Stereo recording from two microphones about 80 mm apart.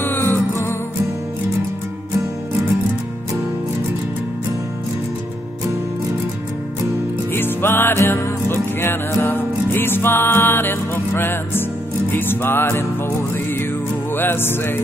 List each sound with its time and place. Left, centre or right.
0.0 s music: left
7.3 s music: left
14.1 s music: left